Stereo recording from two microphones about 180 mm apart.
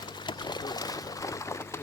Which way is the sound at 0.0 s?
25° left (ahead or behind).